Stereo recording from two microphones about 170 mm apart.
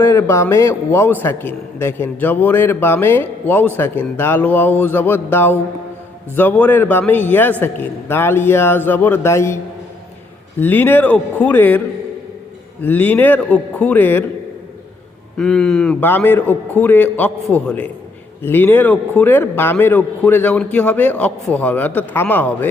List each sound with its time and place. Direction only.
0.0 s a man's voice: 15° left (ahead or behind)
10.6 s a man's voice: 10° left (ahead or behind)
12.8 s a man's voice: 10° left (ahead or behind)
15.4 s a man's voice: 5° left (ahead or behind)